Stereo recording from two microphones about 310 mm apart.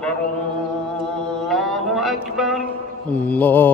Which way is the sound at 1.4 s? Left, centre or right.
Centre.